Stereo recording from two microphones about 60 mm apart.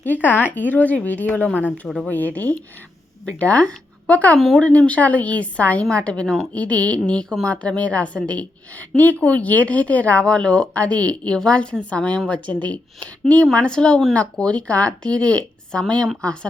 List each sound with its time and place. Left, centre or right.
0.0 s speech: left
4.4 s speech: centre
4.8 s speech: left
6.2 s a woman's voice: centre
6.5 s speech: left